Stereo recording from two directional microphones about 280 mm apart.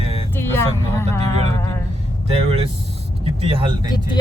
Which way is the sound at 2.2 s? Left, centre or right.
Right.